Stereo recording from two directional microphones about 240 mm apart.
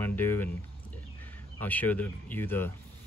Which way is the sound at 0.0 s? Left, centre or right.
Centre.